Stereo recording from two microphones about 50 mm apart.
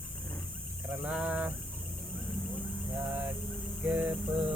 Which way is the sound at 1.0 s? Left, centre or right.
Right.